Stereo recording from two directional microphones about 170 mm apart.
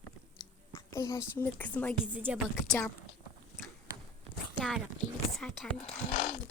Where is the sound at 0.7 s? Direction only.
20° left (ahead or behind).